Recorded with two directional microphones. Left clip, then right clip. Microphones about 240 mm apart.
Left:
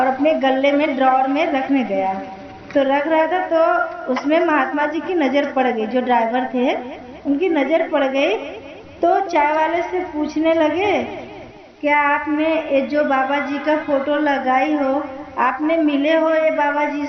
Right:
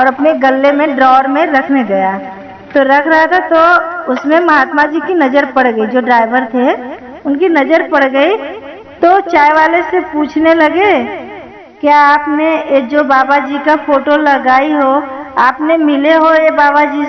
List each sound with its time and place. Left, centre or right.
0.0 s a woman's voice: centre